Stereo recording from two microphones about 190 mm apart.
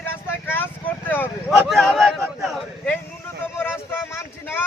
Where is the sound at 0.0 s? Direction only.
10° left (ahead or behind).